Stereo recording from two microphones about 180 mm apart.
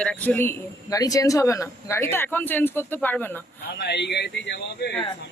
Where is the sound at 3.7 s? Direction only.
70° left (ahead or behind).